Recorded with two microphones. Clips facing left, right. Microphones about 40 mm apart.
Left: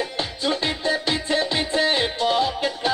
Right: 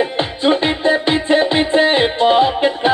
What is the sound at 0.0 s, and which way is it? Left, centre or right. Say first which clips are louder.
Music: right 9 dB; right.